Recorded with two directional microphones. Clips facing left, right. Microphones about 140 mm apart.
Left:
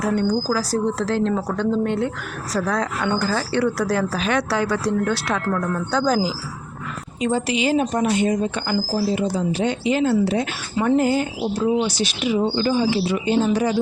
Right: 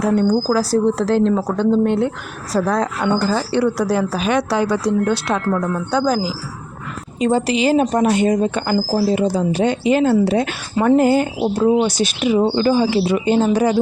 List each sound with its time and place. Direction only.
0.2 s a woman's voice: 30° right (ahead or behind)
3.0 s speech: 15° right (ahead or behind)
6.1 s a woman's voice: centre (ahead or behind)
7.2 s speech: 35° right (ahead or behind)
12.5 s speech: 65° right (ahead or behind); by 13.7 s 45° right (ahead or behind)